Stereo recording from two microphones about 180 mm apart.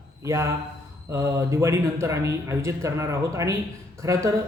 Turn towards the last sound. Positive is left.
turn(degrees=-15)  # may be behind; listen again after turning